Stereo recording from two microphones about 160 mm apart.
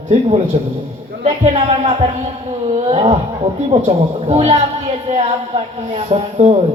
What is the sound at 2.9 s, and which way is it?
A man's voice, 35° right (ahead or behind).